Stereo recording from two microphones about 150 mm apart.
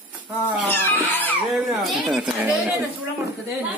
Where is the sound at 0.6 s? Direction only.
15° left (ahead or behind).